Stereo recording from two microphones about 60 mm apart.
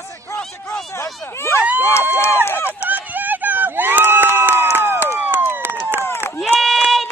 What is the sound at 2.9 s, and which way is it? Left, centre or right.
Run, right.